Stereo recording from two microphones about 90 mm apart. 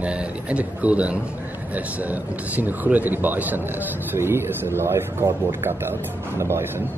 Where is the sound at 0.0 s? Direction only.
15° right (ahead or behind); by 6.7 s 30° right (ahead or behind).